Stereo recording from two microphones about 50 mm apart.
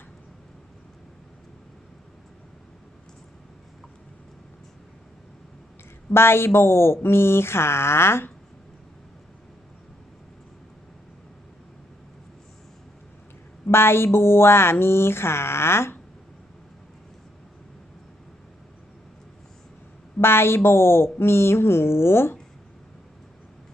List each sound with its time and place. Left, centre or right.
6.1 s speech: left
13.7 s speech: left
20.1 s a woman's voice: left